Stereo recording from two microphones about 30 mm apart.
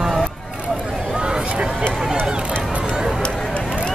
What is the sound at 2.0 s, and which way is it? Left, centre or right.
Run, right.